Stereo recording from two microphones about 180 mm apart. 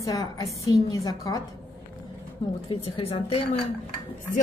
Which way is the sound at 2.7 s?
35° left (ahead or behind).